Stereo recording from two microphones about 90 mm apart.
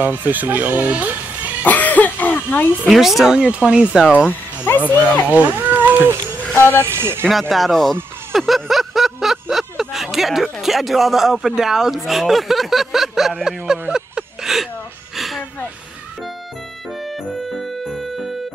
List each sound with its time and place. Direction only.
0.0 s speech: 20° right (ahead or behind)
1.6 s cough: 15° left (ahead or behind)
2.9 s speech: 5° right (ahead or behind)
4.3 s speech: 20° left (ahead or behind)
5.3 s cat: 20° right (ahead or behind)
6.5 s speech: 25° left (ahead or behind)
6.8 s speech: 30° right (ahead or behind)
7.2 s a sound: centre (ahead or behind)
17.0 s music: centre (ahead or behind)